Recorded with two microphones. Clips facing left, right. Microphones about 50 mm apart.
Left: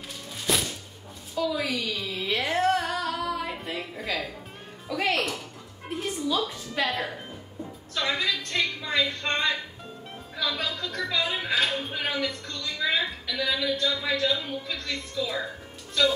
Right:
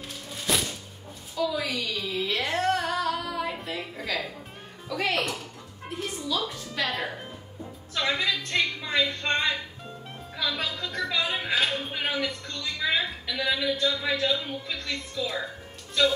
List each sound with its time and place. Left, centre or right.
0.5 s music: centre
1.3 s a woman's voice: centre
2.2 s music: centre
6.5 s a woman's voice: centre
6.9 s a woman's voice: centre
7.9 s a sound: centre
10.3 s a woman's voice: centre